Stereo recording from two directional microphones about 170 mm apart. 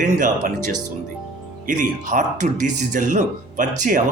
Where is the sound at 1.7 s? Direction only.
50° right (ahead or behind).